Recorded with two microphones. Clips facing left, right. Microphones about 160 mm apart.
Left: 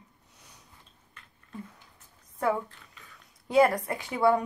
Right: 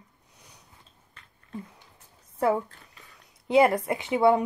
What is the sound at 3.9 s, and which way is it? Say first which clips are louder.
Speech: right 3 dB; 20° right (ahead or behind).